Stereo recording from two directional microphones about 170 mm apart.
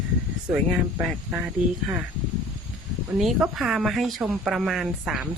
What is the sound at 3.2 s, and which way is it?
Speech, 5° right (ahead or behind).